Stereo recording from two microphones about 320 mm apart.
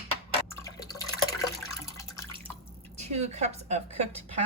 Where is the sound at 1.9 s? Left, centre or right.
Centre.